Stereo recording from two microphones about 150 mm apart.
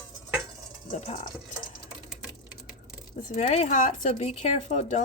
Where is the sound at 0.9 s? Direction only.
50° left (ahead or behind).